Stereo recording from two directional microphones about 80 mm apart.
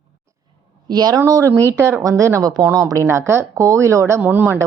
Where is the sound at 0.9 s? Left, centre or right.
Right.